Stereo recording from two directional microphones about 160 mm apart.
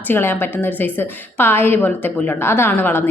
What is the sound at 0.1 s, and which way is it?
A woman's voice, 15° left (ahead or behind).